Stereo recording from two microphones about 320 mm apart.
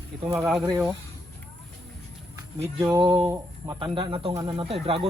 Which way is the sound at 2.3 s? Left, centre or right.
Centre.